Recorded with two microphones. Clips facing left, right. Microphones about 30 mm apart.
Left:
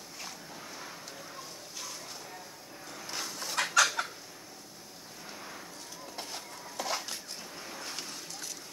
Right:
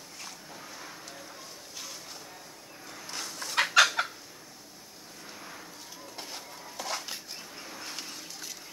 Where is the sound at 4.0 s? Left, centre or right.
Right.